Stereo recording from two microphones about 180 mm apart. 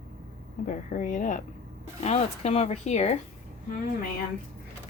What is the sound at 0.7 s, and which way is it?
Speech, 45° left (ahead or behind).